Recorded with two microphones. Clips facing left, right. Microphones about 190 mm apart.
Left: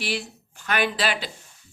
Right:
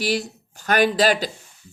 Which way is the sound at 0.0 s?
40° right (ahead or behind).